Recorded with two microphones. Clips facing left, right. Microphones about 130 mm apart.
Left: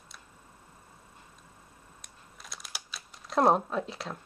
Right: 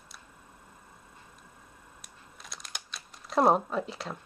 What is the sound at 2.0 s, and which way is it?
Crumpling, centre (ahead or behind).